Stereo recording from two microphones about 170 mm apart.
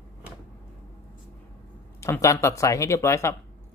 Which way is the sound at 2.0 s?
20° left (ahead or behind).